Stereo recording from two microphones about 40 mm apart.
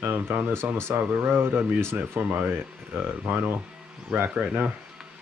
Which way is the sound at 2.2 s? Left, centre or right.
Right.